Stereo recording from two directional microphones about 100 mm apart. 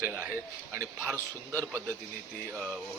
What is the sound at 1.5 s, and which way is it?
Speech, 20° left (ahead or behind).